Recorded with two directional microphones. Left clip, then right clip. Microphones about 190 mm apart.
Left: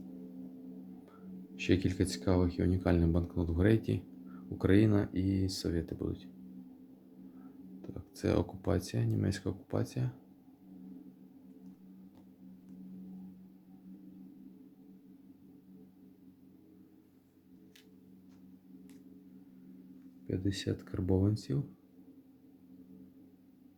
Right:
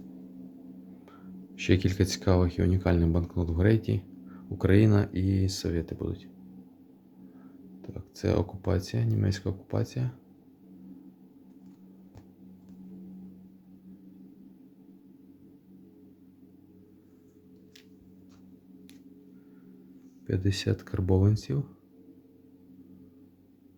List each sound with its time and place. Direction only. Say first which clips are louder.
1.5 s speech: right 4 dB; 15° right (ahead or behind)
7.8 s speech: right 3 dB; 5° right (ahead or behind)
20.2 s speech: right 5 dB; 25° right (ahead or behind)